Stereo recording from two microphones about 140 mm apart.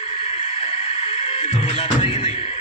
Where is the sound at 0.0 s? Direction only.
45° left (ahead or behind).